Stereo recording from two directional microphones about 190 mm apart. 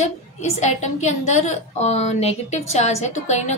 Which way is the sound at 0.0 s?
35° left (ahead or behind).